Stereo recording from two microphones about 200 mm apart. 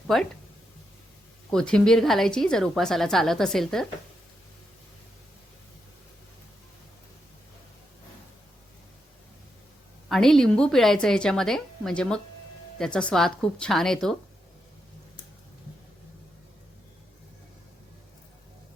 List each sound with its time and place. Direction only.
0.1 s a woman's voice: centre (ahead or behind)
1.5 s a woman's voice: 5° left (ahead or behind)
10.1 s a woman's voice: centre (ahead or behind)